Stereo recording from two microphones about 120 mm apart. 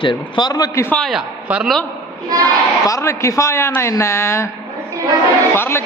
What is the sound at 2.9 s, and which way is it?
A woman's voice, 25° left (ahead or behind).